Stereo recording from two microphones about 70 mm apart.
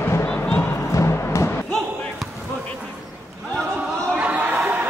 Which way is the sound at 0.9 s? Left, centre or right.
Left.